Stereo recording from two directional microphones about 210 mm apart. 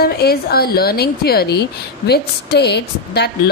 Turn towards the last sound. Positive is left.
turn(degrees=50)  # may be behind; listen again after turning